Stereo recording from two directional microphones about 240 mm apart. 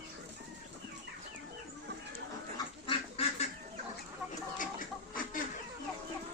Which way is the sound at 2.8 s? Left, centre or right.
Left.